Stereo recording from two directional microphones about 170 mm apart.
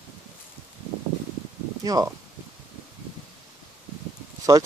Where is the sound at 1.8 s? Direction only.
20° right (ahead or behind).